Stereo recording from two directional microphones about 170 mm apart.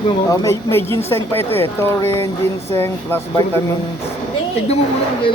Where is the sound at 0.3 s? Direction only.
15° left (ahead or behind).